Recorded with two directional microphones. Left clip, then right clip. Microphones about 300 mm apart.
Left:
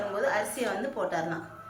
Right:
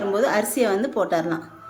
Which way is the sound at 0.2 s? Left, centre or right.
Right.